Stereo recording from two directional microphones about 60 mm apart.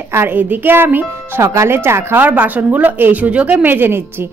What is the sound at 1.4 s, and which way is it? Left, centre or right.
A woman's voice, right.